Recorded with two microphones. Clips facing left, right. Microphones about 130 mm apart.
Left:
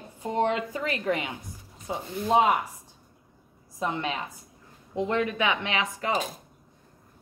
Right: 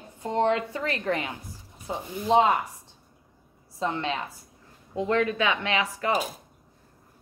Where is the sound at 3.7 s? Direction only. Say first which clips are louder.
Right 1 dB; 15° left (ahead or behind).